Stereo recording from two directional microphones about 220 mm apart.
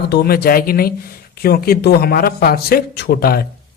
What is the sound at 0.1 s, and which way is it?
A man's voice, 45° left (ahead or behind).